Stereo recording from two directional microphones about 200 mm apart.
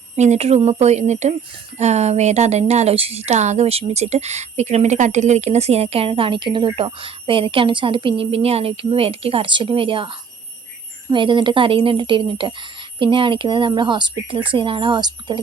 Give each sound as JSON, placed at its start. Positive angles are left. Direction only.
{"t": 0.2, "sound": "a woman's voice", "side_deg": -35}